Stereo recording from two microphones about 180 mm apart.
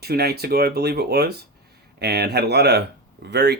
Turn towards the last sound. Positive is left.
turn(degrees=-65)  # may be behind; listen again after turning